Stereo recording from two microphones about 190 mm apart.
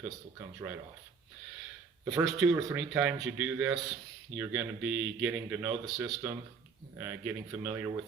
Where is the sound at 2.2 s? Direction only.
Centre (ahead or behind).